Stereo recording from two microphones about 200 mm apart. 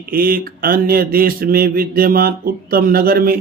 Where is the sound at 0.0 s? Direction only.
45° right (ahead or behind).